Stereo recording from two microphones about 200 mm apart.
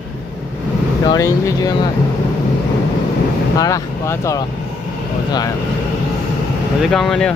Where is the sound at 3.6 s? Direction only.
15° left (ahead or behind).